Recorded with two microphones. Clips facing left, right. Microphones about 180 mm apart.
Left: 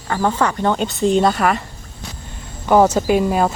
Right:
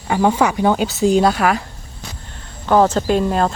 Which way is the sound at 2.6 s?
10° left (ahead or behind).